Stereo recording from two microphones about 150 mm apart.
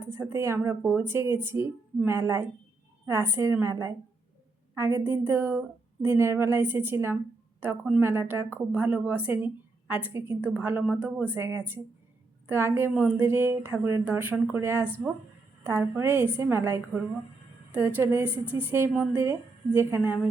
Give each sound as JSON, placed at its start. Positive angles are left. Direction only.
{"t": 0.1, "sound": "a woman's voice", "side_deg": -15}
{"t": 20.0, "sound": "a woman's voice", "side_deg": -5}